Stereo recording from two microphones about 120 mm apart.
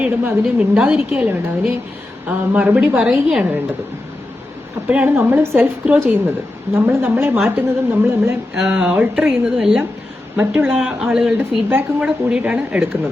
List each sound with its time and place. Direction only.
0.0 s a woman's voice: 10° right (ahead or behind)
4.9 s a woman's voice: 15° right (ahead or behind)
8.5 s a woman's voice: 5° right (ahead or behind)